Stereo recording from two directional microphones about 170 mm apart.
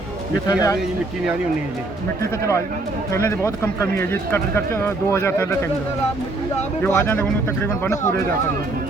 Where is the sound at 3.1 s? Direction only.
15° left (ahead or behind).